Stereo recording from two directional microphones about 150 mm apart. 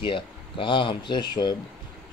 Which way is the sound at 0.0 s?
35° left (ahead or behind).